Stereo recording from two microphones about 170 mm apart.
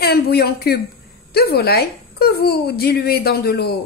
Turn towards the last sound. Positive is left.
turn(degrees=70)  # may be behind; listen again after turning